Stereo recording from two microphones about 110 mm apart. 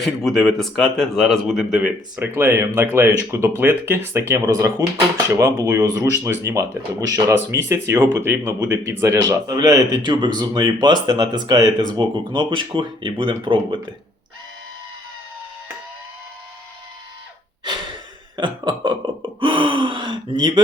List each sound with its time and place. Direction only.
0.0 s speech: 5° left (ahead or behind); by 13.7 s 50° right (ahead or behind)
17.7 s gasp: 45° right (ahead or behind)